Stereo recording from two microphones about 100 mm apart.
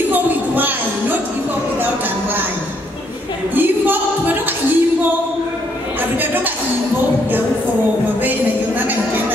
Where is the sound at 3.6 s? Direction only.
20° right (ahead or behind).